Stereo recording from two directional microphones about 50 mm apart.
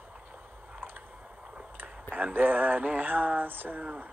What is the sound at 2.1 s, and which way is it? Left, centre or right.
Speech, right.